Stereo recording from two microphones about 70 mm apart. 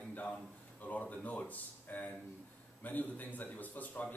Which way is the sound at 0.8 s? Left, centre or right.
Left.